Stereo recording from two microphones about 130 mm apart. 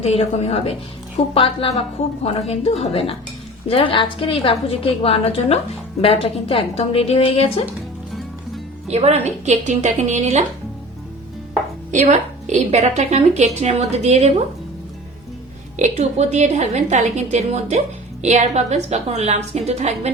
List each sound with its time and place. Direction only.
0.0 s a woman's voice: 50° left (ahead or behind)
8.9 s a woman's voice: 55° right (ahead or behind)
11.9 s a woman's voice: 65° right (ahead or behind)
15.8 s a woman's voice: 60° right (ahead or behind)